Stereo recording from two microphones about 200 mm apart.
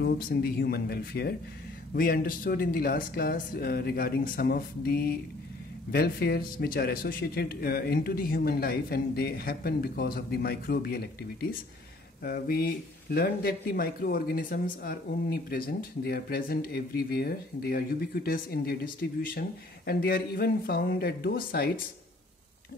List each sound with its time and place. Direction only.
0.0 s speech: 50° left (ahead or behind)
12.2 s speech: 50° left (ahead or behind)